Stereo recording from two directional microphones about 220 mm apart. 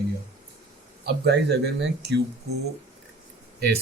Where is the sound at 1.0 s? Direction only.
50° right (ahead or behind).